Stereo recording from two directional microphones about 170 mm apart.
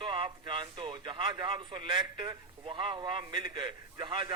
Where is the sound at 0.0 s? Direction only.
30° right (ahead or behind).